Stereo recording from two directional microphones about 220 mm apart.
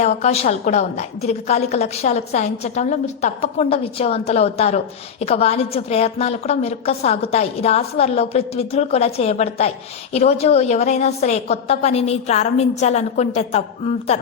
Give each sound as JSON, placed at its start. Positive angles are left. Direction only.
{"t": 0.0, "sound": "a woman's voice", "side_deg": 30}